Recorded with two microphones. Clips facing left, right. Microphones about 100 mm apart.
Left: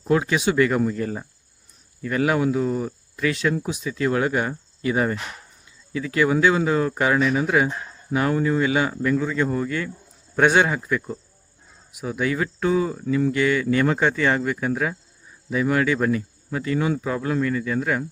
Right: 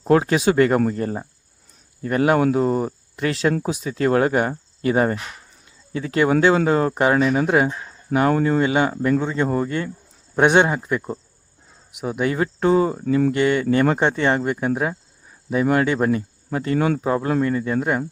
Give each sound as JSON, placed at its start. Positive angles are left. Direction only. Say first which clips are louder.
{"t": 0.0, "sound": "speech", "louder": "right 4 dB", "side_deg": -45}
{"t": 10.3, "sound": "speech", "louder": "right 2 dB", "side_deg": -20}
{"t": 12.2, "sound": "speech", "louder": "right 3 dB", "side_deg": -35}
{"t": 13.4, "sound": "speech", "louder": "right 2 dB", "side_deg": -30}